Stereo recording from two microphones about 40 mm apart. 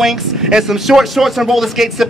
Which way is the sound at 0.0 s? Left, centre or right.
Centre.